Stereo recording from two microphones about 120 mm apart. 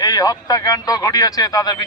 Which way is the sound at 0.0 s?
30° left (ahead or behind).